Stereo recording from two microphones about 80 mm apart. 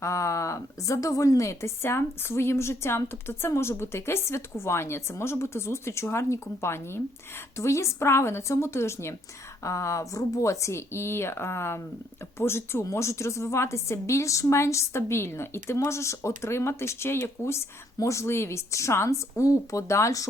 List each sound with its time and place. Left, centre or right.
0.0 s a woman's voice: left